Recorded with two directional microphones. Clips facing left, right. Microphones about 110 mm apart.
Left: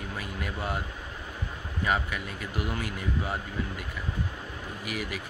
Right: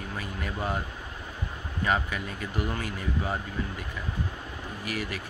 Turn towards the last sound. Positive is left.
turn(degrees=10)  # may be behind; listen again after turning